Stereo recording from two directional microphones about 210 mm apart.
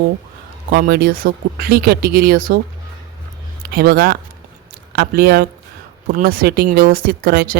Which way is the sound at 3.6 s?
45° right (ahead or behind).